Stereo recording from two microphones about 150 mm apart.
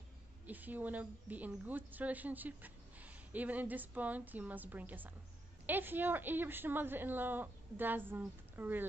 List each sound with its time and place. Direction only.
0.5 s a woman's voice: 10° right (ahead or behind)